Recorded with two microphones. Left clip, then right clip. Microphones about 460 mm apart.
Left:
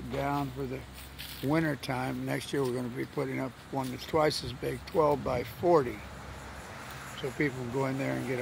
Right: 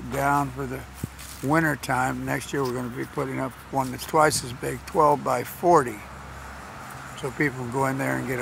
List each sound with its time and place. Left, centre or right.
0.1 s speech: left
7.2 s speech: left